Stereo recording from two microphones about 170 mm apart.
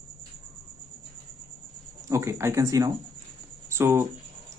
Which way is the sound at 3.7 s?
15° right (ahead or behind).